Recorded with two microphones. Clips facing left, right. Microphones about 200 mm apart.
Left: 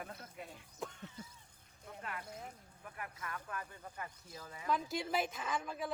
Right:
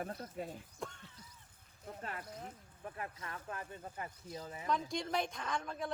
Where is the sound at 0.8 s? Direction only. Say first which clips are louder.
Left 1 dB; centre (ahead or behind).